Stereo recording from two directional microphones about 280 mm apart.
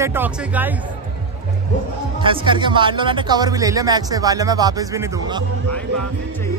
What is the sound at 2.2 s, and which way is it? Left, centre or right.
Speech, centre.